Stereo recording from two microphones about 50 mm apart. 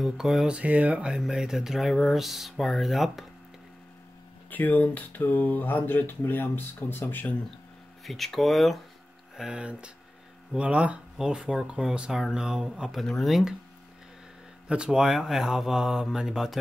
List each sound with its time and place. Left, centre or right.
0.0 s speech: centre
0.5 s speech: right
1.0 s speech: centre
4.5 s speech: left
8.0 s speech: centre
9.6 s speech: right
11.1 s speech: centre
14.9 s speech: centre